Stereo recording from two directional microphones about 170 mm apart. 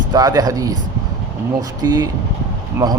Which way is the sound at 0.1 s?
20° right (ahead or behind).